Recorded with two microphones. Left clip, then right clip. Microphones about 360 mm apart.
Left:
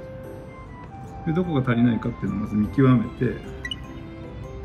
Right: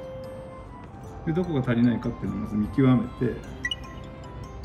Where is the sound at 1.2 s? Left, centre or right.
Centre.